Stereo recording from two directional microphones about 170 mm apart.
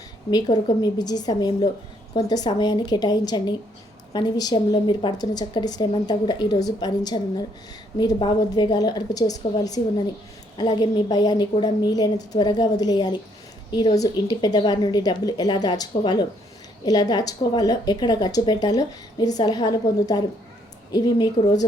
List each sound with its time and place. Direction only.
0.3 s speech: 25° left (ahead or behind)